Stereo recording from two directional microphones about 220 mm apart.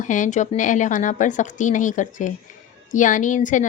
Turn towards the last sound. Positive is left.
turn(degrees=35)  # may be behind; listen again after turning